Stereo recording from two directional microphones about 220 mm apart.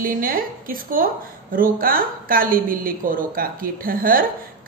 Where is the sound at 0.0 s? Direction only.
40° right (ahead or behind).